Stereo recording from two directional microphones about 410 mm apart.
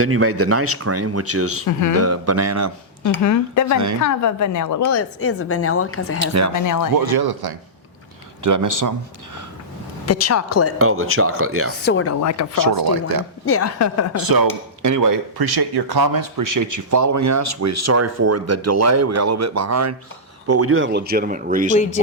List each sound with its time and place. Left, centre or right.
0.0 s speech: right
3.2 s a woman's voice: left
6.1 s speech: right
6.5 s speech: left
6.9 s speech: right
8.4 s speech: right
10.1 s a woman's voice: left
10.8 s speech: right
11.9 s speech: left
12.2 s speech: left
12.5 s speech: right
13.4 s a woman's voice: left
14.2 s speech: right; by 21.8 s centre